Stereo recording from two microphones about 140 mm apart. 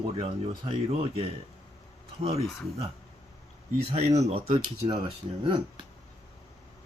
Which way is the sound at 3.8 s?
50° right (ahead or behind).